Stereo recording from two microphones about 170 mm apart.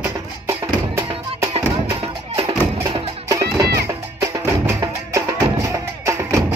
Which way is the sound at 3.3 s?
20° right (ahead or behind).